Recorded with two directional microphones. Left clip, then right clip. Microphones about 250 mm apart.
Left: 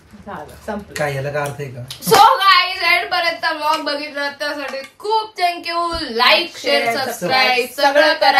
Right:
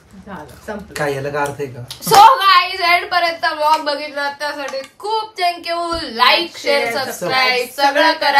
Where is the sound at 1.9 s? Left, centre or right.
Centre.